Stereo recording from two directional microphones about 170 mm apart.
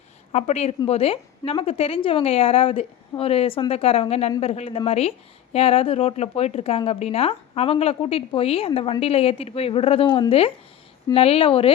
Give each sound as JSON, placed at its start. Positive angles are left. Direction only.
{"t": 0.3, "sound": "speech", "side_deg": 40}